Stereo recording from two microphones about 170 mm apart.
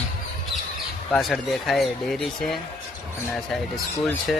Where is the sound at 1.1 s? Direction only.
5° left (ahead or behind).